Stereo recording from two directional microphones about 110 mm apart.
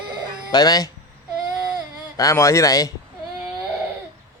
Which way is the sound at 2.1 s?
30° left (ahead or behind).